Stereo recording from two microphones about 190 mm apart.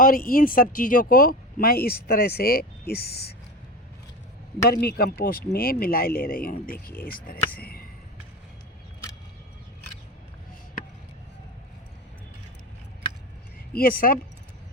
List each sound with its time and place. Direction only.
0.0 s speech: 50° left (ahead or behind)
4.7 s speech: 55° left (ahead or behind)
13.7 s speech: 50° left (ahead or behind)